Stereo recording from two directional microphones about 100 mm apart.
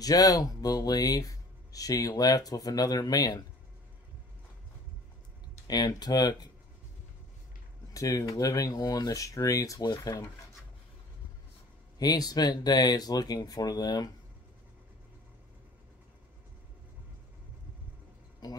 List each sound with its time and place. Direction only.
0.0 s speech: 40° left (ahead or behind)
5.7 s speech: 45° left (ahead or behind)
7.9 s speech: 35° left (ahead or behind)
12.0 s speech: 40° left (ahead or behind)
18.4 s speech: 45° left (ahead or behind)